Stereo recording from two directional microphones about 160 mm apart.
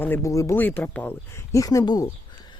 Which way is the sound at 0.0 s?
15° left (ahead or behind).